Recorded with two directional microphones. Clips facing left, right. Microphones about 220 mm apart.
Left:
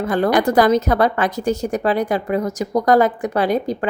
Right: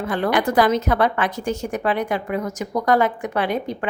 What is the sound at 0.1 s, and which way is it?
A woman's voice, 40° left (ahead or behind).